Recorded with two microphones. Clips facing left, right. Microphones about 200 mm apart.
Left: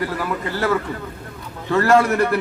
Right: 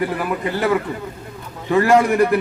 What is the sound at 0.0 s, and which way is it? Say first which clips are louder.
A man's voice: right 3 dB; 15° right (ahead or behind).